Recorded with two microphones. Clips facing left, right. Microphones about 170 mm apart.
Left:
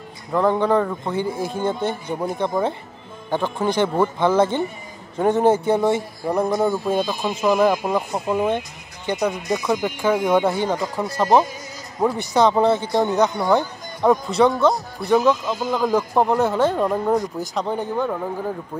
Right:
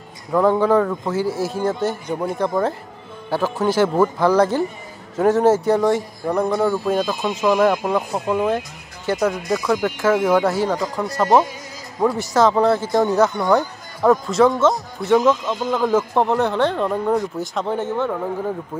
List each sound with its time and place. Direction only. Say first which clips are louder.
0.3 s speech: right 2 dB; 5° right (ahead or behind)
15.9 s speech: even; centre (ahead or behind)
17.4 s speech: right 1 dB; centre (ahead or behind)